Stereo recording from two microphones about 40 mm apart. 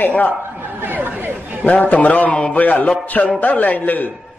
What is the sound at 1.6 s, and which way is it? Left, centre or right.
A man's voice, left.